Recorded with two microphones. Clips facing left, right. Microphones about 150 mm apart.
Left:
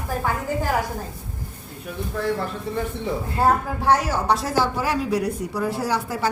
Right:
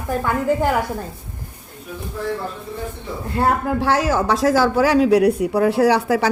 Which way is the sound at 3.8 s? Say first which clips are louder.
Right 3 dB; 90° right.